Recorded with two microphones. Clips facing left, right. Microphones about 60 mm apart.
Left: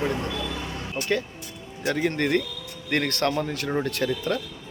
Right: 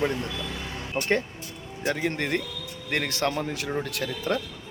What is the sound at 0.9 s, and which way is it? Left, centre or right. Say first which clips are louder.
Speech: right 3 dB; right.